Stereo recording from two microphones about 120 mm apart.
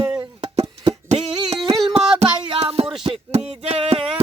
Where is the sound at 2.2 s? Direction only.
55° right (ahead or behind).